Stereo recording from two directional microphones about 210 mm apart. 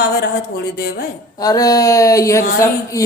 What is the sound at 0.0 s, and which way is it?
Speech, 50° left (ahead or behind).